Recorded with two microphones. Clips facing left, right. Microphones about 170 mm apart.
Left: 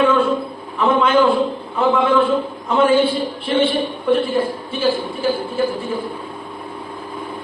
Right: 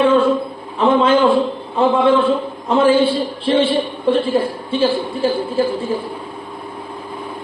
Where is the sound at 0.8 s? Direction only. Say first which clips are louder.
Right 3 dB; 30° right (ahead or behind).